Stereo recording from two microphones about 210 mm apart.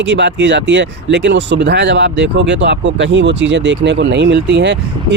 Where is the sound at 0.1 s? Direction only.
55° right (ahead or behind).